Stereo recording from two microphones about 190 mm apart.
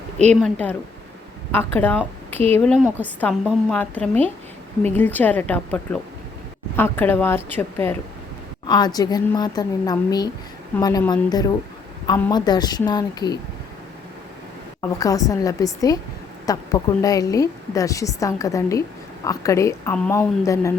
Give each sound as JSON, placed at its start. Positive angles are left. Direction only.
{"t": 0.3, "sound": "a woman's voice", "side_deg": 5}
{"t": 8.6, "sound": "a woman's voice", "side_deg": 20}
{"t": 14.8, "sound": "a woman's voice", "side_deg": 20}